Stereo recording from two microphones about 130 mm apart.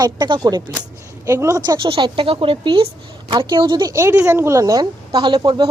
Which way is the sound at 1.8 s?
40° right (ahead or behind).